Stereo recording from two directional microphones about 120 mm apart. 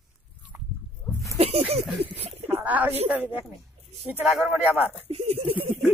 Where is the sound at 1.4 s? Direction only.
60° right (ahead or behind).